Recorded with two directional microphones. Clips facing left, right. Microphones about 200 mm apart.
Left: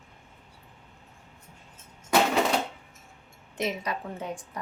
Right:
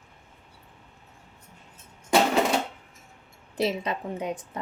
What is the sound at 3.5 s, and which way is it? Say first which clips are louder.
A woman's voice: right 4 dB; 30° right (ahead or behind).